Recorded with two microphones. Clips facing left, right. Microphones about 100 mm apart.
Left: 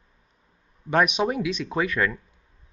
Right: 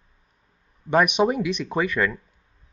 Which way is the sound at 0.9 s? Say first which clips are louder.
Right 3 dB; centre (ahead or behind).